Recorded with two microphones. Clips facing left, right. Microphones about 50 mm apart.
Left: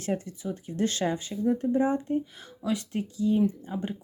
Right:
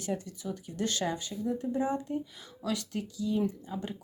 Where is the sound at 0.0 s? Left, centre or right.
Left.